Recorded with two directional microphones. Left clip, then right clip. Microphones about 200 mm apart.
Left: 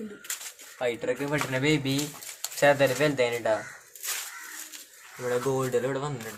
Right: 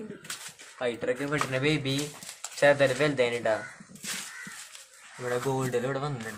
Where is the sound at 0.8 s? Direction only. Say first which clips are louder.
Left 1 dB; centre (ahead or behind).